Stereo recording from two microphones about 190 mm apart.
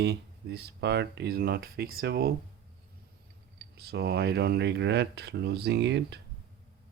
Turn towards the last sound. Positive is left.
turn(degrees=-65)  # may be behind; listen again after turning